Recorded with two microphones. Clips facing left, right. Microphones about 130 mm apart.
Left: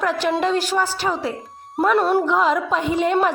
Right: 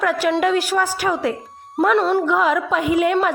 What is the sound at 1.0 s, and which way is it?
A woman's voice, 10° left (ahead or behind).